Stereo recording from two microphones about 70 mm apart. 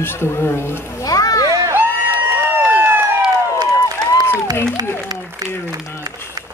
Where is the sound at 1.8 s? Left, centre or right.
Left.